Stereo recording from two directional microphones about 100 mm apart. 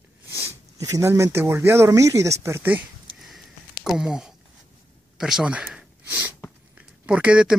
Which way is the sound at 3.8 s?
5° right (ahead or behind).